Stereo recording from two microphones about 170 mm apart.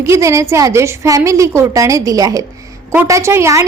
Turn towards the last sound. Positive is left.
turn(degrees=-15)  # may be behind; listen again after turning